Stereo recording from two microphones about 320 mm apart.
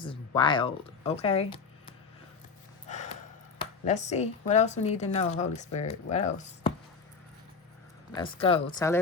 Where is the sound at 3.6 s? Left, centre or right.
Left.